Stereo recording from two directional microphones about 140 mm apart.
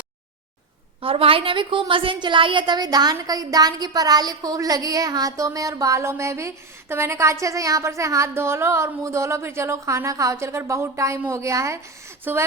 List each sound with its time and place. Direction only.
1.0 s a woman's voice: 40° right (ahead or behind); by 12.5 s 15° right (ahead or behind)